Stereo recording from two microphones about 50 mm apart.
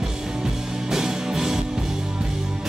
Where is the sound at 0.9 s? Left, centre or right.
Centre.